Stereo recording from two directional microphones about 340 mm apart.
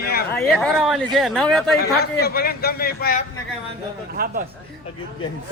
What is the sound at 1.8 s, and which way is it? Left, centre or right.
A man's voice, left.